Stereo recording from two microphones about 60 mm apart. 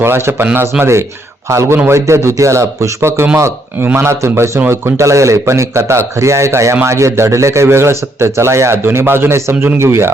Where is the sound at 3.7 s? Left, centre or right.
Right.